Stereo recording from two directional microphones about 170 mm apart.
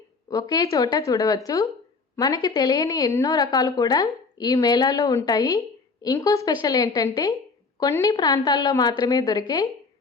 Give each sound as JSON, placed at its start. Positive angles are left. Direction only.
{"t": 0.3, "sound": "a woman's voice", "side_deg": 20}